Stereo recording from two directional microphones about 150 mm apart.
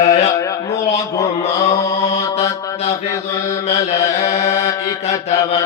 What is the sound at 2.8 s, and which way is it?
Mantra, 45° left (ahead or behind).